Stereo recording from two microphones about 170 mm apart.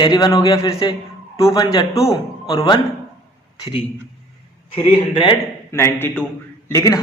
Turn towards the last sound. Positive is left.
turn(degrees=20)  # may be behind; listen again after turning